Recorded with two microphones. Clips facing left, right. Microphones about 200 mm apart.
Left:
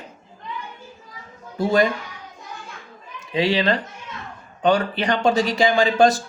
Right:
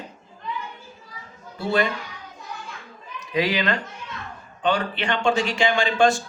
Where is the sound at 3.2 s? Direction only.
30° left (ahead or behind).